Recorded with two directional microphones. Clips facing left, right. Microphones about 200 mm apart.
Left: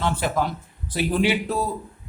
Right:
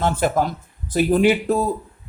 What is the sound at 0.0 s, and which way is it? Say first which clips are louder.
Speech: right 4 dB; 45° right (ahead or behind).